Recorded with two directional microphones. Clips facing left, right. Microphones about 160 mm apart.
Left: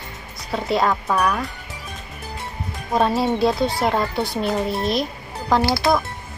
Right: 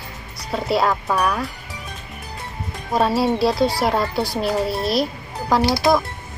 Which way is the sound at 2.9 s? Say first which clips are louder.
Right 1 dB; centre (ahead or behind).